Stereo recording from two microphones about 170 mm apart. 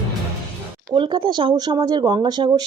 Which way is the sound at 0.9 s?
30° right (ahead or behind).